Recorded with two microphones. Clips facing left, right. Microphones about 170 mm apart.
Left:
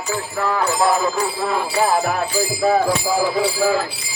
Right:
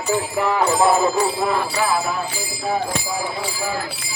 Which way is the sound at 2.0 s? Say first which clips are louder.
Left 5 dB; 75° left (ahead or behind).